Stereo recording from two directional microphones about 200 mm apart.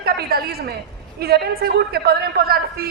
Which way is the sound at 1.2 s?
50° right (ahead or behind).